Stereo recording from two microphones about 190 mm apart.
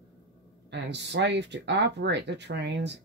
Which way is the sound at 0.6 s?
65° right (ahead or behind).